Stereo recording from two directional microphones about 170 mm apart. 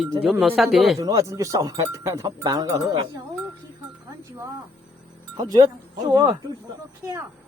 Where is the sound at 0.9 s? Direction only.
20° right (ahead or behind).